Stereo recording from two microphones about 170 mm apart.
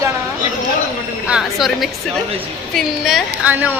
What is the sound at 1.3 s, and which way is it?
A woman's voice, centre (ahead or behind).